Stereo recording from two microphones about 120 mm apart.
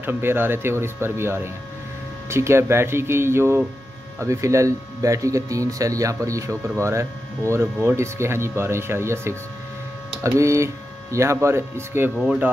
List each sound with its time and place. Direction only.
0.0 s speech: 20° right (ahead or behind)
12.2 s speech: 5° right (ahead or behind)